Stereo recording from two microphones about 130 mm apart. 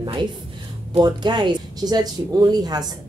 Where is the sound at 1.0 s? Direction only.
35° right (ahead or behind).